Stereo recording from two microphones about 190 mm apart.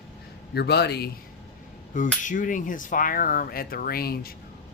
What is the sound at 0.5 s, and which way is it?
Speech, 60° left (ahead or behind).